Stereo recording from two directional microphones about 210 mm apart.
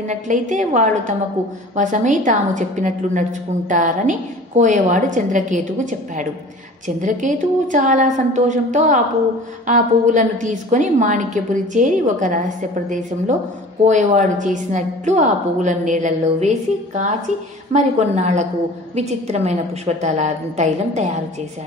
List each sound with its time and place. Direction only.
0.1 s a woman's voice: 35° right (ahead or behind)
13.8 s a woman's voice: 35° right (ahead or behind)